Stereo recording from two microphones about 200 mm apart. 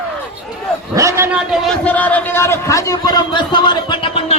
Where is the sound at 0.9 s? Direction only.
15° right (ahead or behind).